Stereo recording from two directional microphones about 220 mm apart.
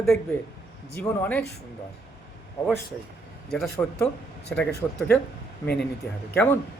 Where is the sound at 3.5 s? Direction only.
5° left (ahead or behind).